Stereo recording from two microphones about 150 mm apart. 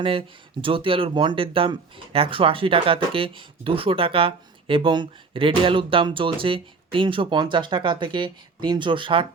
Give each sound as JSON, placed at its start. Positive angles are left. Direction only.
{"t": 0.0, "sound": "speech", "side_deg": -35}